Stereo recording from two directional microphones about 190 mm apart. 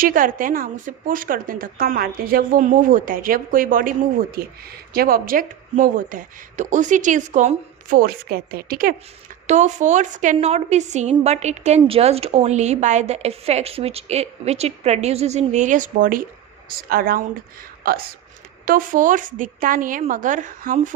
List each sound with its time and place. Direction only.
0.0 s a woman's voice: 45° right (ahead or behind)
9.5 s a woman's voice: 40° right (ahead or behind)